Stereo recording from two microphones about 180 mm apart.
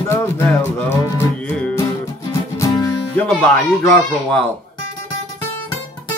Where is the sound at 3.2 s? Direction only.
10° left (ahead or behind).